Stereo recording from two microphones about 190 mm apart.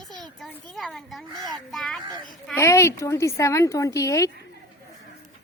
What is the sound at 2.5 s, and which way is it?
A woman's voice, 15° left (ahead or behind).